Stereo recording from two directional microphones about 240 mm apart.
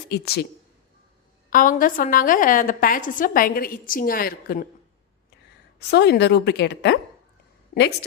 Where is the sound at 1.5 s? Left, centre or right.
Left.